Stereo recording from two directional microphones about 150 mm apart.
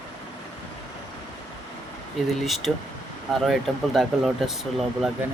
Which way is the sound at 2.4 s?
Centre (ahead or behind).